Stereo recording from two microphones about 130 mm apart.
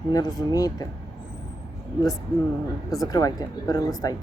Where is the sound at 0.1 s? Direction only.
30° left (ahead or behind).